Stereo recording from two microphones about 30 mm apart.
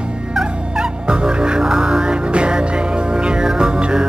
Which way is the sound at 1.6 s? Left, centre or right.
Right.